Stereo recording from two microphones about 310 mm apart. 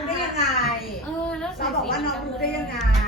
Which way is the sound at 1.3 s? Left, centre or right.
Centre.